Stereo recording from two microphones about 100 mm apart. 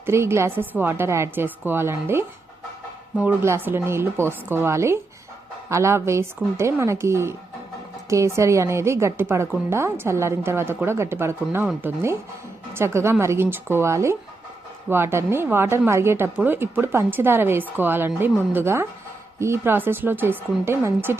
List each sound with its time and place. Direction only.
0.0 s speech: 25° right (ahead or behind)
3.4 s speech: 25° right (ahead or behind)